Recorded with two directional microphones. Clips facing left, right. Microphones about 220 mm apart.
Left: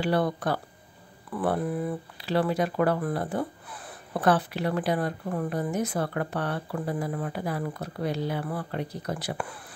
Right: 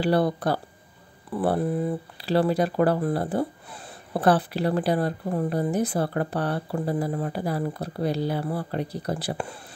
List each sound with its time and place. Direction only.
0.0 s speech: 35° right (ahead or behind)